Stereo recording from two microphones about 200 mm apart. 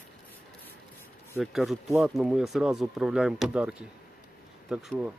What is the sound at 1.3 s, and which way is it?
Speech, centre (ahead or behind).